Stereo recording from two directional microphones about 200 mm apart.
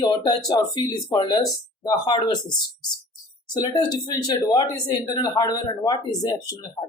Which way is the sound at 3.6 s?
20° left (ahead or behind).